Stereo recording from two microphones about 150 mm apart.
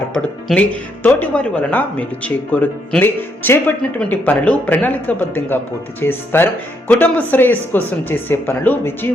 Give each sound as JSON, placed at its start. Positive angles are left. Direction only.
{"t": 0.1, "sound": "speech", "side_deg": 5}